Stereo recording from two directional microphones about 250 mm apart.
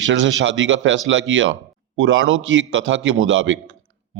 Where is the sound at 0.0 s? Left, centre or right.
Right.